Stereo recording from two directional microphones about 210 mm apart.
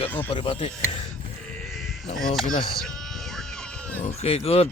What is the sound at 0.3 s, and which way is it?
Speech, 25° left (ahead or behind).